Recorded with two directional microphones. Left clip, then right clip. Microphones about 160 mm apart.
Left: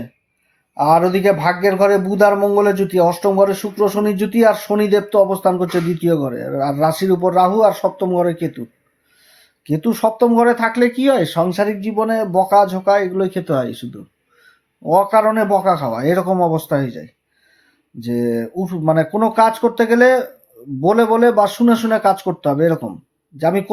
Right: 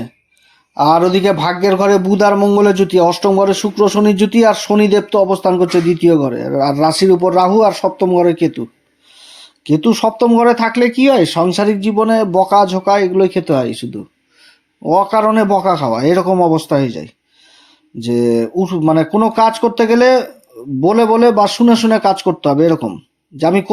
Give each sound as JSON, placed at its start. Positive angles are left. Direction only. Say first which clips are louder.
{"t": 0.7, "sound": "speech", "louder": "right 3 dB", "side_deg": -30}
{"t": 9.6, "sound": "speech", "louder": "right 4 dB", "side_deg": -25}